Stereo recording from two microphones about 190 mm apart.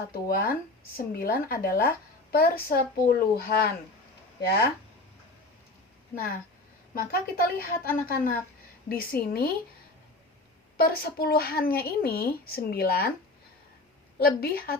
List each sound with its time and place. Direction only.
0.1 s speech: 50° left (ahead or behind)
6.9 s speech: 50° left (ahead or behind)
10.8 s speech: 55° left (ahead or behind)
14.2 s speech: 50° left (ahead or behind)